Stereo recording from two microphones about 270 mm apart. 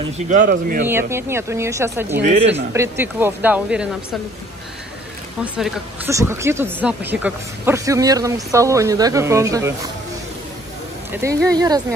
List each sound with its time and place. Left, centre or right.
0.3 s speech: right
0.8 s speech: centre
5.4 s speech: centre
11.1 s speech: centre